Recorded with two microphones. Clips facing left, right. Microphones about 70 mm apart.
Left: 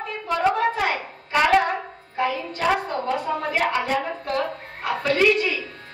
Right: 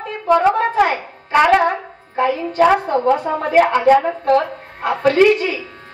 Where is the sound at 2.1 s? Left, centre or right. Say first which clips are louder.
Right 9 dB; right.